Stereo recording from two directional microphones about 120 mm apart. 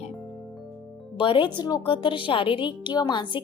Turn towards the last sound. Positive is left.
turn(degrees=40)  # may be behind; listen again after turning